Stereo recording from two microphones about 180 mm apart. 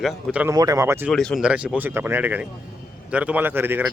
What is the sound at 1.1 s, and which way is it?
Speech, centre (ahead or behind).